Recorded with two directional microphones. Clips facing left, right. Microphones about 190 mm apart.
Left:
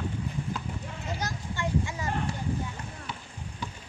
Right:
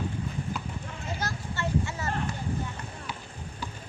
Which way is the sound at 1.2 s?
15° left (ahead or behind).